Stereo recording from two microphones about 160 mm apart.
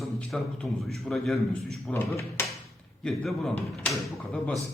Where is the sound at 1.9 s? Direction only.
15° left (ahead or behind).